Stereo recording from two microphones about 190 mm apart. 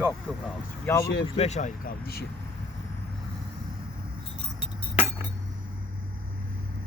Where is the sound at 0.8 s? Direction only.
15° left (ahead or behind).